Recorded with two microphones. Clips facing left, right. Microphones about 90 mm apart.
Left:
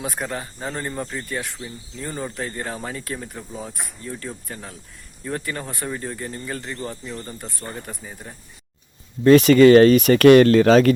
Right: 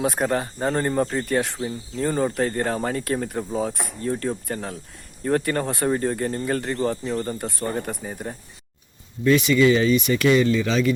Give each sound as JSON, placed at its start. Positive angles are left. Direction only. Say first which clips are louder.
{"t": 0.0, "sound": "speech", "louder": "right 6 dB", "side_deg": -40}
{"t": 7.1, "sound": "speech", "louder": "right 8 dB", "side_deg": -35}
{"t": 7.7, "sound": "speech", "louder": "right 6 dB", "side_deg": -50}
{"t": 9.2, "sound": "speech", "louder": "left 6 dB", "side_deg": 40}